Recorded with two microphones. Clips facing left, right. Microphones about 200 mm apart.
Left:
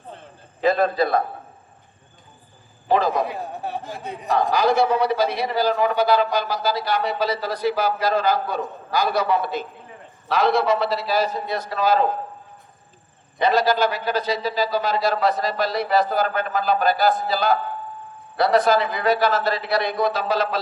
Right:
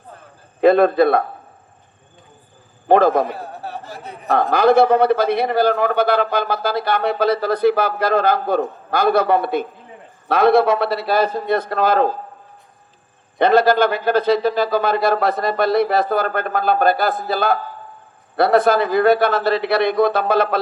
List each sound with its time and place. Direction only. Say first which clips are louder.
0.6 s a man's voice: right 7 dB; 60° right (ahead or behind)
2.8 s a man's voice: right 6 dB; 55° right (ahead or behind)
3.5 s speech: left 1 dB; 15° left (ahead or behind)
4.3 s a man's voice: right 5 dB; 60° right (ahead or behind)
13.4 s a man's voice: right 5 dB; 55° right (ahead or behind)